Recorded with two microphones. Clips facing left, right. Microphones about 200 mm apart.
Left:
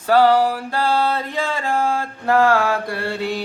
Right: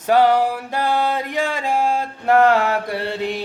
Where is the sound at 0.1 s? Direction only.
20° right (ahead or behind).